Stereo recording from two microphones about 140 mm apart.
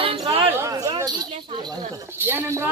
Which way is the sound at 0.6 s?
20° right (ahead or behind).